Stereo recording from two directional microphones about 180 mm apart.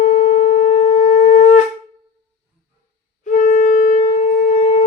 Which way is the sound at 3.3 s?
45° left (ahead or behind).